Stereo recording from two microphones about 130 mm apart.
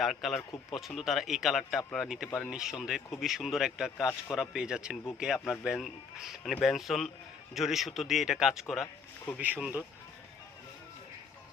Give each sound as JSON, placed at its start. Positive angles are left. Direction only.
{"t": 0.0, "sound": "speech", "side_deg": 0}